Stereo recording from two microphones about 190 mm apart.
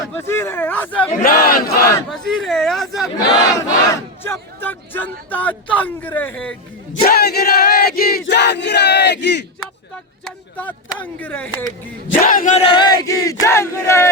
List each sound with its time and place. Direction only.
0.1 s speech: 15° left (ahead or behind)
1.2 s battle cry: 50° left (ahead or behind)
2.0 s speech: centre (ahead or behind)
3.2 s speech: 20° left (ahead or behind)
7.0 s a sound: 55° left (ahead or behind)
8.2 s a sound: 65° left (ahead or behind)
10.2 s speech: 10° left (ahead or behind)
12.2 s battle cry: 45° left (ahead or behind)
12.5 s speech: 25° left (ahead or behind)